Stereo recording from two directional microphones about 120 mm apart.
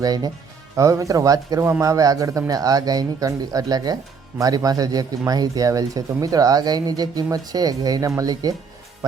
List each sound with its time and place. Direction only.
0.0 s a man's voice: 35° right (ahead or behind)